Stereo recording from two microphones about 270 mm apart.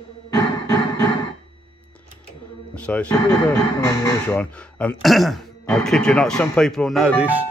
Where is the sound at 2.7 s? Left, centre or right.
Centre.